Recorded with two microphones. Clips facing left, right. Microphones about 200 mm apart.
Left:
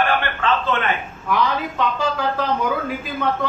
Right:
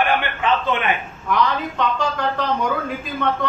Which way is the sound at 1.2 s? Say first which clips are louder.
Right 1 dB; centre (ahead or behind).